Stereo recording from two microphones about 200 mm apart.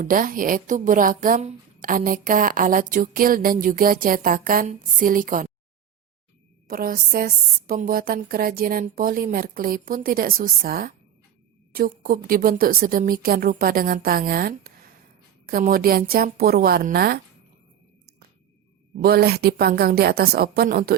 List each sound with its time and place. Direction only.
0.0 s a woman's voice: 45° right (ahead or behind)
6.7 s a woman's voice: 45° right (ahead or behind)
18.9 s a woman's voice: 50° right (ahead or behind)